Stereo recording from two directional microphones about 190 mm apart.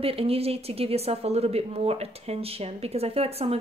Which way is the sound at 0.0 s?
30° right (ahead or behind).